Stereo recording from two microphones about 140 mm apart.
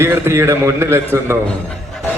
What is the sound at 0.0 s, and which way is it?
A man's voice, 20° right (ahead or behind).